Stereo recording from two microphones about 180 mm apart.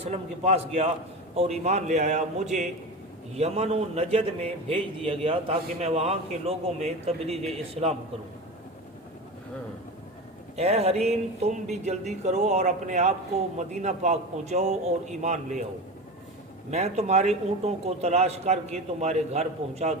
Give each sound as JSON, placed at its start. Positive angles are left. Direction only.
{"t": 1.4, "sound": "a man's voice", "side_deg": -35}
{"t": 10.6, "sound": "a man's voice", "side_deg": -35}
{"t": 16.7, "sound": "a man's voice", "side_deg": -35}